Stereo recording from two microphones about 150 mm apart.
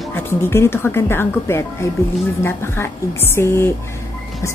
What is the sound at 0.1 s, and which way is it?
A woman's voice, 15° left (ahead or behind).